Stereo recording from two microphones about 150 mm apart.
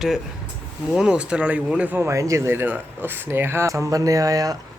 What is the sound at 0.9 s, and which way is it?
Speech, 5° right (ahead or behind).